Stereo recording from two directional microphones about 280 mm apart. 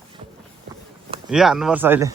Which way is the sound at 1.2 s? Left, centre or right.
Centre.